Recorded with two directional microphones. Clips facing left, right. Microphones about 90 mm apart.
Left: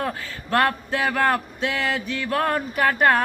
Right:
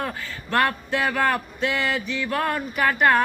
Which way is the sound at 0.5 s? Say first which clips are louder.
Left 1 dB; 35° left (ahead or behind).